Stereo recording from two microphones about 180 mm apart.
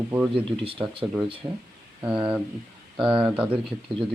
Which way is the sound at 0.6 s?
30° right (ahead or behind).